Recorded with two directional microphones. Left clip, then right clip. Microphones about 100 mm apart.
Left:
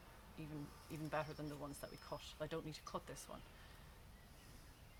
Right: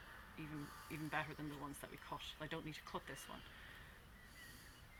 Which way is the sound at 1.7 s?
55° left (ahead or behind).